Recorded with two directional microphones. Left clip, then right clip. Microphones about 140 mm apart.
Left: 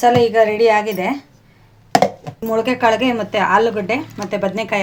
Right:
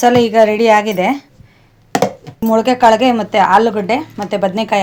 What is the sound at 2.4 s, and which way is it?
A woman's voice, 50° right (ahead or behind).